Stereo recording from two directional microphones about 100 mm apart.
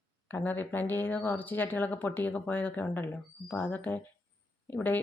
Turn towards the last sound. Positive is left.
turn(degrees=15)  # may be behind; listen again after turning